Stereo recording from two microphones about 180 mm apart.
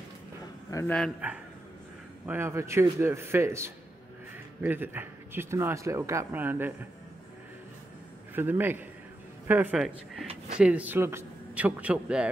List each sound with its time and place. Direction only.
0.7 s speech: 15° left (ahead or behind)
1.2 s a man's voice: 10° right (ahead or behind)
8.4 s a man's voice: 10° right (ahead or behind)